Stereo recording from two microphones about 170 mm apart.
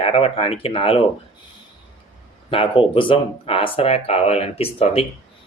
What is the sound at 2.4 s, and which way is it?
Speech, 30° left (ahead or behind).